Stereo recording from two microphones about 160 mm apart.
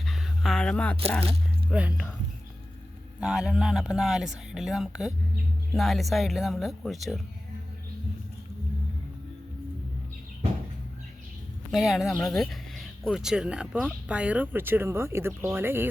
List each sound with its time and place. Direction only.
0.0 s a sound: centre (ahead or behind)
1.2 s biting: 35° right (ahead or behind)
1.7 s speech: 10° right (ahead or behind)
3.2 s speech: 5° right (ahead or behind)
11.7 s speech: centre (ahead or behind)